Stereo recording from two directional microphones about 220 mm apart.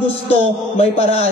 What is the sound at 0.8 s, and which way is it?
Speech, 30° left (ahead or behind).